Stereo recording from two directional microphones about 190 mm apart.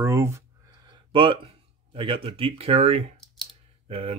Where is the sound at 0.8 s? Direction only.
25° right (ahead or behind).